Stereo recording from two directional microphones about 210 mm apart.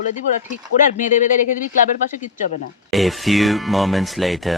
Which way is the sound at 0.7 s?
90° left.